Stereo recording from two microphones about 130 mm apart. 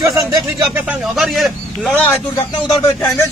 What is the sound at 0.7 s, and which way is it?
A man's voice, 10° right (ahead or behind).